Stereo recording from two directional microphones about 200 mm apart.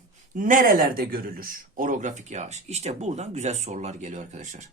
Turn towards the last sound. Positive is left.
turn(degrees=-35)  # may be behind; listen again after turning